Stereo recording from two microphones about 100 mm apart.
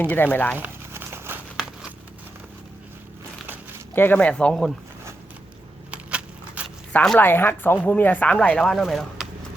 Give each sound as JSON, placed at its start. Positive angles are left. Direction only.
{"t": 0.0, "sound": "speech", "side_deg": 15}
{"t": 0.5, "sound": "crumpling", "side_deg": -20}
{"t": 3.9, "sound": "speech", "side_deg": 20}
{"t": 5.9, "sound": "a sound", "side_deg": -10}
{"t": 6.9, "sound": "a woman's voice", "side_deg": 5}
{"t": 7.2, "sound": "speech", "side_deg": 20}